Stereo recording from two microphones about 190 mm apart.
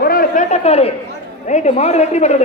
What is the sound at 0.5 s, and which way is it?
Speech, 35° left (ahead or behind).